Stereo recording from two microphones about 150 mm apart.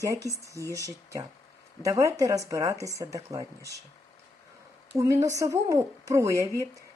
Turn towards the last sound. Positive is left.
turn(degrees=-20)  # may be behind; listen again after turning